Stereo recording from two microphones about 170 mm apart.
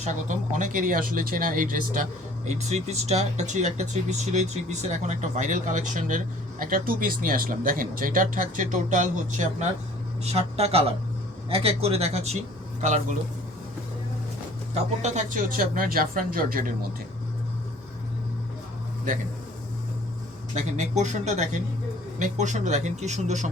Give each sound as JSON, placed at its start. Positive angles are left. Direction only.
{"t": 0.5, "sound": "speech", "side_deg": -50}
{"t": 15.0, "sound": "speech", "side_deg": -45}
{"t": 20.6, "sound": "speech", "side_deg": -40}